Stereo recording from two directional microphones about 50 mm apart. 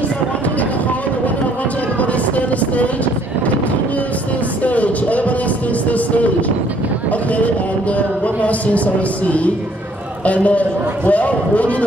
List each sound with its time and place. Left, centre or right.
2.0 s vehicle: left
4.6 s music: left
7.1 s a sound: left
10.2 s a man's voice: left